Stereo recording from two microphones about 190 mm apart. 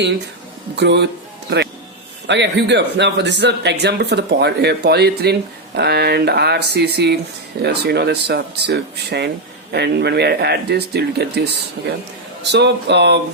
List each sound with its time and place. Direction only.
0.8 s speech: 65° right (ahead or behind)